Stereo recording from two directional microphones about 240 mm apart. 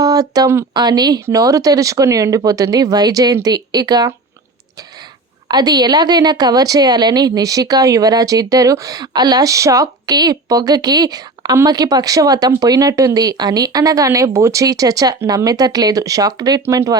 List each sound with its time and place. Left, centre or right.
0.0 s a woman's voice: centre
5.5 s a woman's voice: centre